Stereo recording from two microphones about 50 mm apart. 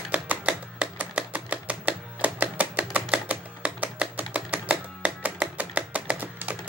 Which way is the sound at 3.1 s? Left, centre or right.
Right.